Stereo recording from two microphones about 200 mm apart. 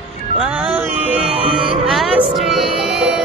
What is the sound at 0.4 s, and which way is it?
Music, 5° right (ahead or behind).